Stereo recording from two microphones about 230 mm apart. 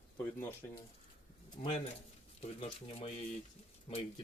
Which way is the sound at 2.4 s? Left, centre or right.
Left.